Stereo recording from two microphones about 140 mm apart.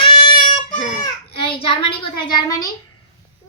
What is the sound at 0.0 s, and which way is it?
Child singing, 35° left (ahead or behind).